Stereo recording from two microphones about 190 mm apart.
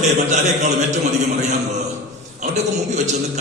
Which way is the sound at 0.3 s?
40° right (ahead or behind).